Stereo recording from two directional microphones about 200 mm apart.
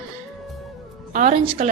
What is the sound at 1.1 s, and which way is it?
Speech, 35° right (ahead or behind).